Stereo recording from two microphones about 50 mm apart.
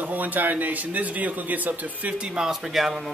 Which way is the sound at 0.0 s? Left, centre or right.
Right.